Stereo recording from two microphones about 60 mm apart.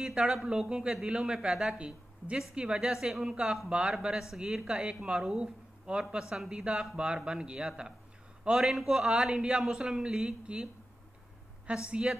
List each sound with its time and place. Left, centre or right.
0.0 s speech: centre